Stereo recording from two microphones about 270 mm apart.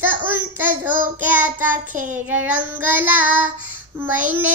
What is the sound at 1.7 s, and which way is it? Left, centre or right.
Child singing, right.